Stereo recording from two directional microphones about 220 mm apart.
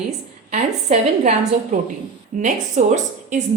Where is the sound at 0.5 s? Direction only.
30° right (ahead or behind).